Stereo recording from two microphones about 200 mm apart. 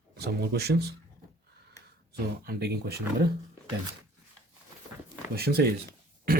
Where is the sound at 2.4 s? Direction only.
50° right (ahead or behind).